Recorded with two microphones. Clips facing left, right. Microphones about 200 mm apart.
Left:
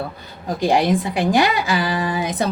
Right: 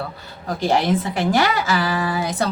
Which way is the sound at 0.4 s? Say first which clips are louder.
Left 2 dB; 15° left (ahead or behind).